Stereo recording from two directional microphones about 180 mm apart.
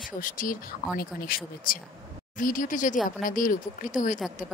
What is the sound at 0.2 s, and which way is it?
A woman's voice, 50° left (ahead or behind).